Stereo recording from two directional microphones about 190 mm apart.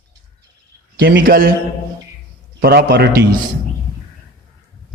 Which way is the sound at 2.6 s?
55° right (ahead or behind).